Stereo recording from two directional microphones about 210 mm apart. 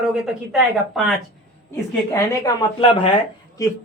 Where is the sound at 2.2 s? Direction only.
15° left (ahead or behind).